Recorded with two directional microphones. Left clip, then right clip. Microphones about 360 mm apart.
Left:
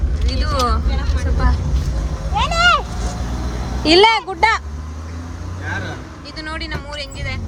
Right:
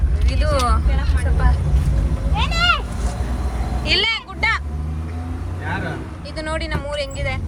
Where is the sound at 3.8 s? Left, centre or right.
Centre.